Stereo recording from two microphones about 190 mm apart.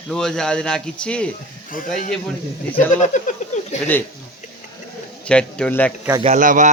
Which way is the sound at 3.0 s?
40° left (ahead or behind).